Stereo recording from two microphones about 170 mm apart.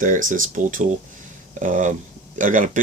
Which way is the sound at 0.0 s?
50° right (ahead or behind).